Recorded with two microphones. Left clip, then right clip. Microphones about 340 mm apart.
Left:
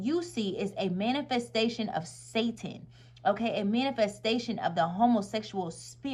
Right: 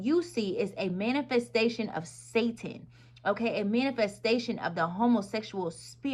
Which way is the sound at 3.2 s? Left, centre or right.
Left.